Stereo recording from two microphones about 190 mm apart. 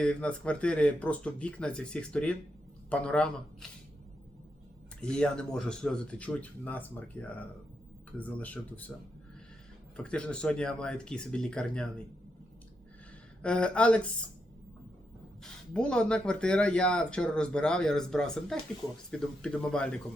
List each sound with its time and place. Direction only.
0.0 s speech: 5° left (ahead or behind)
4.9 s speech: 5° left (ahead or behind)
10.0 s speech: 5° left (ahead or behind)
13.4 s speech: 5° left (ahead or behind)
15.7 s speech: 5° left (ahead or behind)